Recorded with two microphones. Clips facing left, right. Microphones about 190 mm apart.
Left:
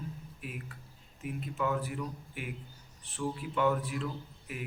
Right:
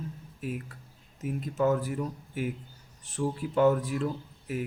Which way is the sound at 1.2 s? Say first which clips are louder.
Right 7 dB; 40° right (ahead or behind).